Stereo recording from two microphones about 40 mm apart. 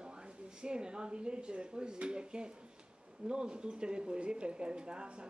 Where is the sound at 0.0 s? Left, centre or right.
Right.